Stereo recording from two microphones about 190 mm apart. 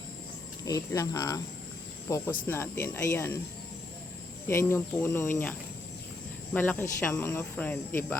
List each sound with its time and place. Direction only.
0.6 s speech: 20° left (ahead or behind)
4.4 s speech: 15° left (ahead or behind)